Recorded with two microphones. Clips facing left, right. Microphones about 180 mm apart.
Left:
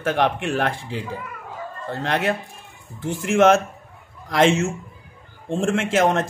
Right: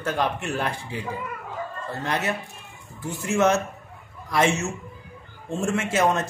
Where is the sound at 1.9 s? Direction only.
90° left.